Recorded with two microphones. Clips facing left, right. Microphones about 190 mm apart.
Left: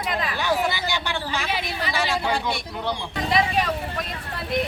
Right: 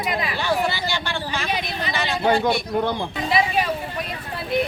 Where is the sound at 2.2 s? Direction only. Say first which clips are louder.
Right 6 dB; 55° right (ahead or behind).